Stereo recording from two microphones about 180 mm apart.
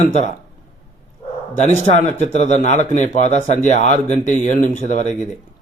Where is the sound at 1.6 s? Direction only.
40° left (ahead or behind).